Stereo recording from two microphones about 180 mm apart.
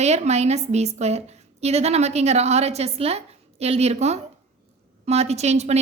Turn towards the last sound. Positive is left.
turn(degrees=-35)  # may be behind; listen again after turning